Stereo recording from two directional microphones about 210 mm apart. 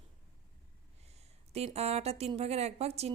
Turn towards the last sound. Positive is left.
turn(degrees=-30)  # may be behind; listen again after turning